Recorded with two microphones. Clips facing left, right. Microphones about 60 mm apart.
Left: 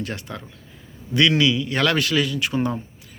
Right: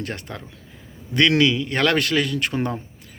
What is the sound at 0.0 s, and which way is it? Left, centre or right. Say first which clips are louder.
Speech: even; right.